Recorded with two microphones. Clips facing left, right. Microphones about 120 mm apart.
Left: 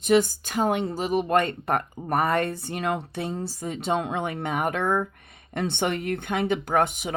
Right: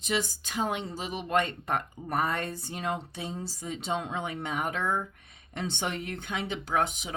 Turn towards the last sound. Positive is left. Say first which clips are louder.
# left 5 dB
turn(degrees=55)  # may be behind; listen again after turning